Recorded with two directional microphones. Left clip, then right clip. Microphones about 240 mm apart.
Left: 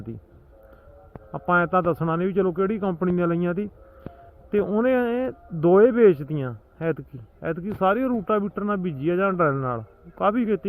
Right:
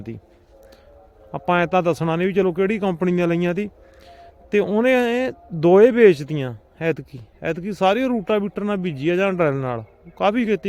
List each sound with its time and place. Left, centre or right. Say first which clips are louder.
1.3 s speech: right 2 dB; centre